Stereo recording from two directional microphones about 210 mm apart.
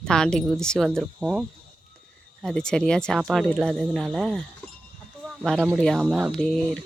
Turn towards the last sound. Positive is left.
turn(degrees=5)  # may be behind; listen again after turning